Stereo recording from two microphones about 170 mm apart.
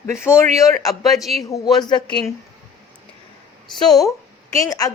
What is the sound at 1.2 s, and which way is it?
Speech, centre (ahead or behind).